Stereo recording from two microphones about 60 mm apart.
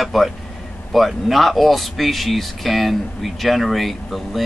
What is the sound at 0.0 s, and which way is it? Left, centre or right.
Speech, centre.